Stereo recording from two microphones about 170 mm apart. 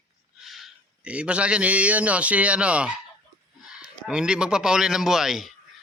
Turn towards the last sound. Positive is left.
turn(degrees=0)  # may be behind; listen again after turning